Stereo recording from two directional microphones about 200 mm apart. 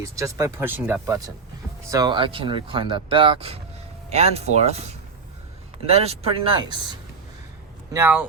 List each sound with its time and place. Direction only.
0.0 s speech: 15° right (ahead or behind)
7.9 s speech: 10° right (ahead or behind)